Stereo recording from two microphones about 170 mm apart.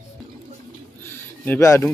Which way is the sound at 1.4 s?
15° left (ahead or behind).